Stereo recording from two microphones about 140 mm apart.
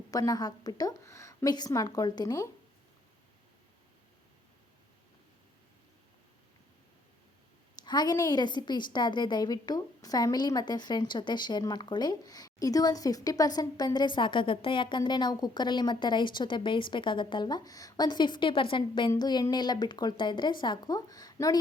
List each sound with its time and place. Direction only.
0.1 s a woman's voice: 25° left (ahead or behind)
7.9 s a woman's voice: 30° left (ahead or behind)